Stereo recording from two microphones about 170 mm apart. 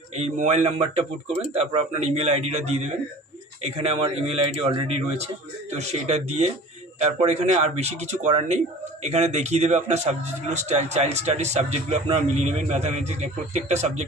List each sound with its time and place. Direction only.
0.2 s a man's voice: 40° right (ahead or behind)